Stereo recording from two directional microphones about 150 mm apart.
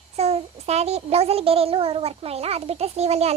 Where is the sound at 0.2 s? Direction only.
45° right (ahead or behind).